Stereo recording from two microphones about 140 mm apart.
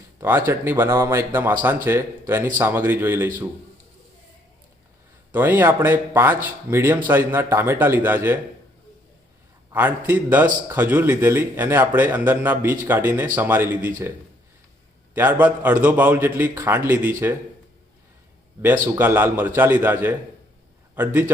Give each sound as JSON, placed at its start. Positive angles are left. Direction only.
{"t": 0.2, "sound": "speech", "side_deg": -15}
{"t": 5.3, "sound": "speech", "side_deg": -15}
{"t": 9.7, "sound": "speech", "side_deg": -15}
{"t": 15.1, "sound": "speech", "side_deg": -15}
{"t": 18.9, "sound": "a man's voice", "side_deg": -15}